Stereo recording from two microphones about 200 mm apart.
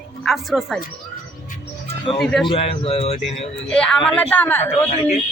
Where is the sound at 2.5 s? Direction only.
30° left (ahead or behind).